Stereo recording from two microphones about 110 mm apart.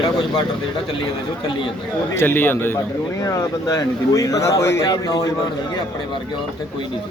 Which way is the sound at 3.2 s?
35° left (ahead or behind).